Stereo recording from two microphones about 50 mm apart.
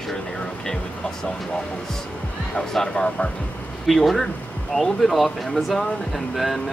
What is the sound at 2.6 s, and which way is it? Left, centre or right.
Speech, centre.